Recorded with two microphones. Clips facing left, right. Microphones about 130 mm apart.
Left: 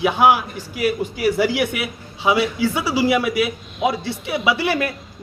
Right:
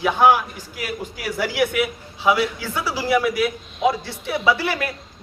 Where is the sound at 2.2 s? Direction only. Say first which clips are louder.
Left 2 dB; 15° left (ahead or behind).